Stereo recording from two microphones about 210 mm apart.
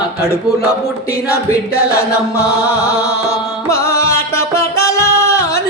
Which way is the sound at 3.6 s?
15° left (ahead or behind).